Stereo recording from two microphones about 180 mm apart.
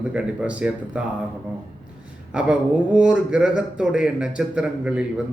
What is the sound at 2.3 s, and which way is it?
A man's voice, 5° right (ahead or behind).